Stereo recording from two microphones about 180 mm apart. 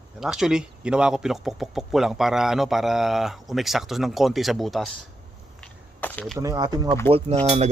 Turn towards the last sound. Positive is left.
turn(degrees=-40)  # may be behind; listen again after turning